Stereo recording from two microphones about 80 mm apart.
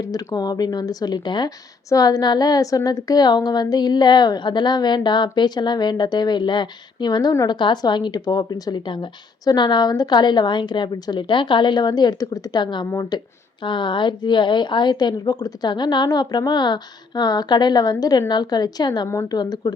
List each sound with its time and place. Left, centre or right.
0.3 s a woman's voice: left
1.5 s a woman's voice: left
10.9 s a woman's voice: left
13.1 s a woman's voice: left